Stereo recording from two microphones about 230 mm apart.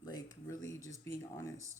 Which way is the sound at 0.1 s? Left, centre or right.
Centre.